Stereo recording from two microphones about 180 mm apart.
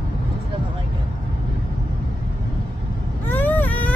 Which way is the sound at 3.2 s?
10° left (ahead or behind).